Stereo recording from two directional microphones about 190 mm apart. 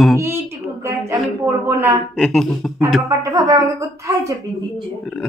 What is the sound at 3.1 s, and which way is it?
Speech, 15° right (ahead or behind).